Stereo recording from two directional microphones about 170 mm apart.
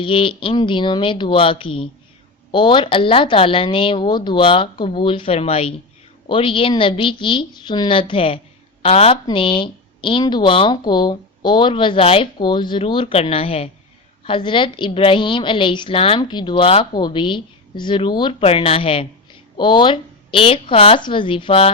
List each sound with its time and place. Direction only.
0.0 s a woman's voice: 30° left (ahead or behind)